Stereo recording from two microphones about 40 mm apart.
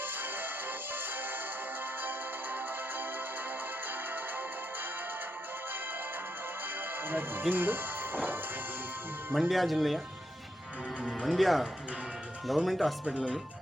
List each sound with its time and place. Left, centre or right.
0.0 s music: right
6.7 s music: right
7.5 s speech: right
9.3 s speech: centre
11.1 s speech: centre